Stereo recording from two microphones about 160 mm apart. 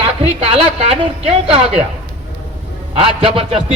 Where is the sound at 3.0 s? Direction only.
35° right (ahead or behind).